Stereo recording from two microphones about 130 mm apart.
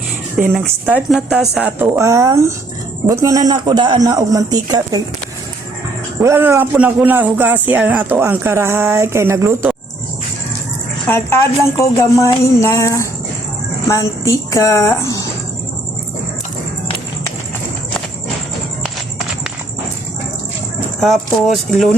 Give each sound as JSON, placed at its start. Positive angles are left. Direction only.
{"t": 0.4, "sound": "a man's voice", "side_deg": -10}
{"t": 2.0, "sound": "a man's voice", "side_deg": -25}
{"t": 6.2, "sound": "a man's voice", "side_deg": -20}
{"t": 11.1, "sound": "a woman's voice", "side_deg": 20}
{"t": 21.0, "sound": "speech", "side_deg": 0}